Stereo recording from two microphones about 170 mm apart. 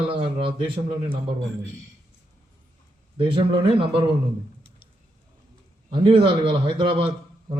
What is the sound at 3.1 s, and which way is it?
Speech, 30° right (ahead or behind).